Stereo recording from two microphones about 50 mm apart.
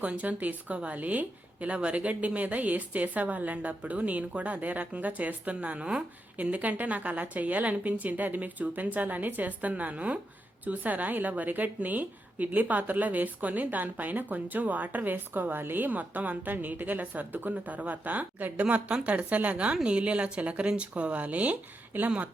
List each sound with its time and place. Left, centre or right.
0.0 s a woman's voice: right